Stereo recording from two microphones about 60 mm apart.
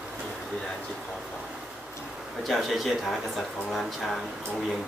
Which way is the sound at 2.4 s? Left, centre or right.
Centre.